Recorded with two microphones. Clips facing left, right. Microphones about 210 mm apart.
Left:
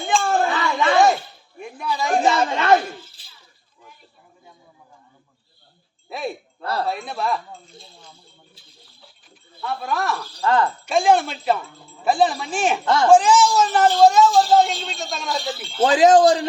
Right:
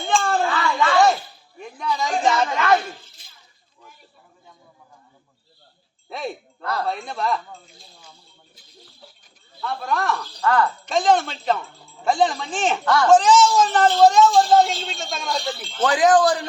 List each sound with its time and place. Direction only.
0.0 s a sound: 5° left (ahead or behind)
0.4 s a sound: 20° left (ahead or behind)
1.5 s a sound: 10° left (ahead or behind)
2.5 s speech: 30° left (ahead or behind)
3.2 s a sound: 30° left (ahead or behind)
6.1 s speech: 5° left (ahead or behind)
6.6 s speech: 30° left (ahead or behind)
6.8 s speech: 5° left (ahead or behind)
9.6 s speech: 5° left (ahead or behind)
10.4 s speech: 25° left (ahead or behind)
10.8 s speech: 10° left (ahead or behind)
12.8 s speech: 20° left (ahead or behind)
13.1 s speech: 10° left (ahead or behind)
15.8 s speech: 25° left (ahead or behind)